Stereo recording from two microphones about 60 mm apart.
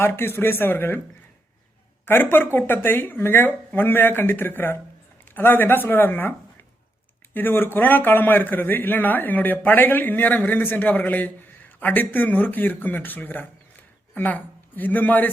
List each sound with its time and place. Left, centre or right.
0.0 s a man's voice: left
2.0 s a man's voice: left
7.3 s a man's voice: left